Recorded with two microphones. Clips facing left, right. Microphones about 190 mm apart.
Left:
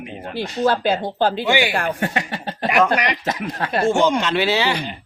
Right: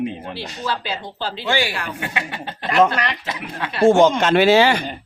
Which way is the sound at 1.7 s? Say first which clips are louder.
Left 6 dB; 50° left (ahead or behind).